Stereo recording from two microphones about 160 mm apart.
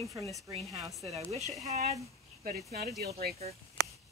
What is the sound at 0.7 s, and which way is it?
Speech, 20° right (ahead or behind).